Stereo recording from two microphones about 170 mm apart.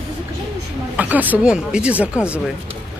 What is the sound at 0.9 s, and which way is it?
A man's voice, 10° right (ahead or behind).